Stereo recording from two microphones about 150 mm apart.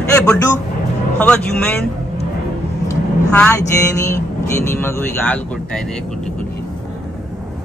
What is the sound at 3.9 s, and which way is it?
Vehicle, 20° left (ahead or behind).